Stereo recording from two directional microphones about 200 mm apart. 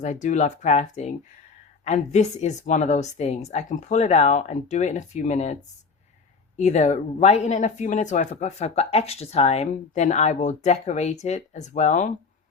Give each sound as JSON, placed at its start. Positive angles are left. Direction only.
{"t": 0.0, "sound": "speech", "side_deg": 35}
{"t": 6.6, "sound": "speech", "side_deg": 35}